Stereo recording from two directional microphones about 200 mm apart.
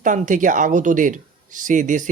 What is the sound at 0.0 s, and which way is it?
Speech, 40° right (ahead or behind).